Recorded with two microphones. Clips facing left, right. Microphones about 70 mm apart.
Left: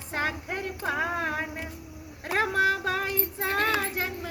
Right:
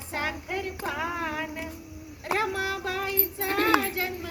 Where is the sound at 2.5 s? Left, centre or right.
Left.